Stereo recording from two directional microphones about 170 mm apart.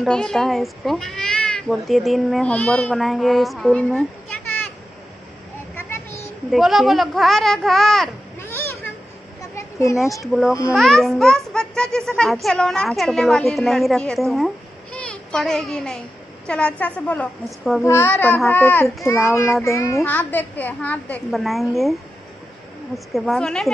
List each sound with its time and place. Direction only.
0.0 s a woman's voice: 5° left (ahead or behind)
5.8 s a sound: 15° left (ahead or behind)
6.5 s a woman's voice: centre (ahead or behind)
8.4 s children playing: 15° left (ahead or behind)
10.2 s a woman's voice: centre (ahead or behind)